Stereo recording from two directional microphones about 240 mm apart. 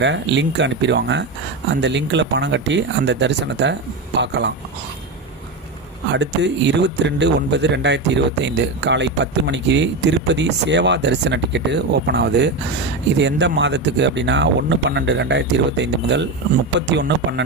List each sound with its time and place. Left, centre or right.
0.0 s a man's voice: right
6.1 s a man's voice: right